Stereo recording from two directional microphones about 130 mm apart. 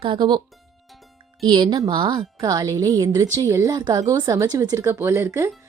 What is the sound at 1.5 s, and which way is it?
A woman's voice, 35° right (ahead or behind).